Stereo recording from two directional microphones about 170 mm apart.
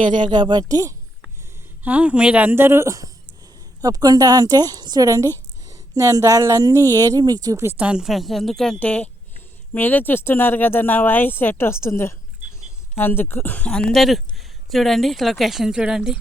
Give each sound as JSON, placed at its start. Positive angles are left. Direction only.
{"t": 0.0, "sound": "a woman's voice", "side_deg": -25}
{"t": 1.8, "sound": "a woman's voice", "side_deg": -10}